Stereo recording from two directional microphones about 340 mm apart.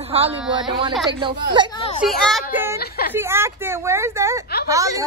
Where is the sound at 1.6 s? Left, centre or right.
Centre.